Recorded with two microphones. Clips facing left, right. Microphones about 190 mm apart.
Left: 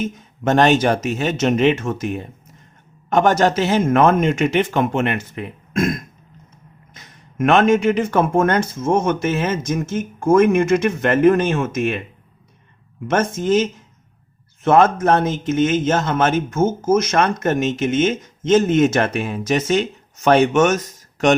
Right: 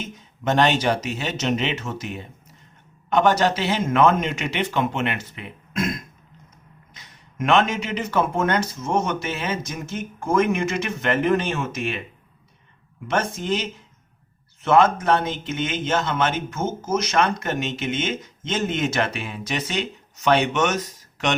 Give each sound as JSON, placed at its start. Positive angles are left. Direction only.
{"t": 0.0, "sound": "speech", "side_deg": 50}
{"t": 13.1, "sound": "speech", "side_deg": 45}